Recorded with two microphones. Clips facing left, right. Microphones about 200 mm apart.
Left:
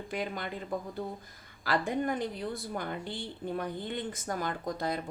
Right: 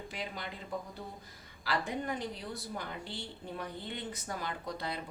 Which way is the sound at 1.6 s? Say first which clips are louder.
Left 5 dB; 50° left (ahead or behind).